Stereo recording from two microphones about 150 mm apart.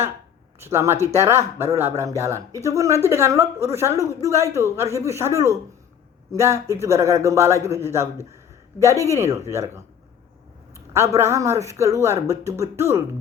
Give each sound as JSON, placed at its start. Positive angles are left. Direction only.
{"t": 0.6, "sound": "speech", "side_deg": -15}
{"t": 11.2, "sound": "speech", "side_deg": -20}